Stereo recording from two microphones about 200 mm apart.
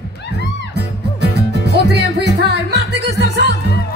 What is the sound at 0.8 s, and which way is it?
Music, 55° right (ahead or behind).